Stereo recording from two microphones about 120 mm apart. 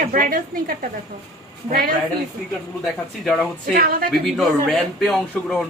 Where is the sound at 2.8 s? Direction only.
Centre (ahead or behind).